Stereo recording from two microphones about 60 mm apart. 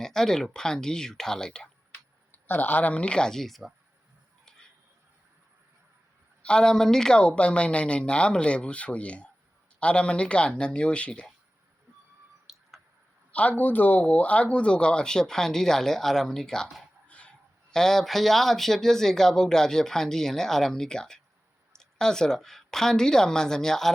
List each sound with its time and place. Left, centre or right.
0.0 s speech: centre
2.3 s speech: left; by 3.6 s centre
6.4 s speech: centre
12.5 s a sound: centre
13.3 s speech: left; by 16.6 s centre
17.1 s a woman's voice: centre